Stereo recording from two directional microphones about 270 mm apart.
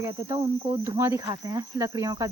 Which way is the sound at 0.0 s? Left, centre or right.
Centre.